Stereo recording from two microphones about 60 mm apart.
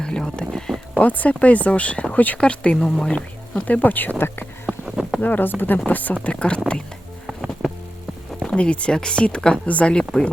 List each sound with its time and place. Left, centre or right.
0.0 s speech: centre
0.9 s speech: left
4.6 s a sound: centre
5.2 s speech: left
6.1 s speech: centre
8.4 s speech: centre